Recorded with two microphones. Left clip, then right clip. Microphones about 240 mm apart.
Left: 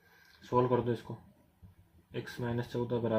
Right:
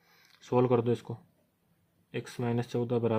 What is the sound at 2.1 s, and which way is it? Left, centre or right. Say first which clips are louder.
Speech: right 4 dB; right.